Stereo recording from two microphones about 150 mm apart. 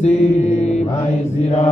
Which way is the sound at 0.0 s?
45° left (ahead or behind).